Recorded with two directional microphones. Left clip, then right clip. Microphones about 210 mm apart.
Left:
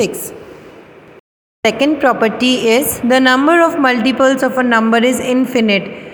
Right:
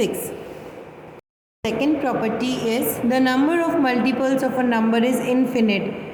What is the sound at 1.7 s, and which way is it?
A woman's voice, 35° left (ahead or behind).